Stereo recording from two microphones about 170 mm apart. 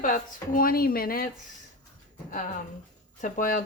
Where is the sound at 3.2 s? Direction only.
50° left (ahead or behind).